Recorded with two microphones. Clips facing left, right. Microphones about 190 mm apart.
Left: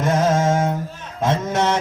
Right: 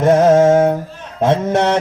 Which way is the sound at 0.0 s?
55° right (ahead or behind).